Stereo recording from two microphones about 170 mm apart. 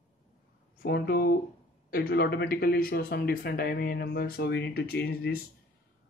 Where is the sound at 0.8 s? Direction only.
75° left (ahead or behind).